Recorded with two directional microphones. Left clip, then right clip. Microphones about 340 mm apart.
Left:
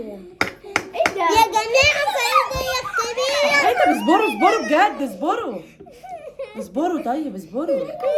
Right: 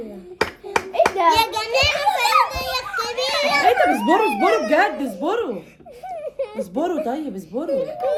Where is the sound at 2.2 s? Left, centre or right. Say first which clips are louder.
Right 1 dB; centre.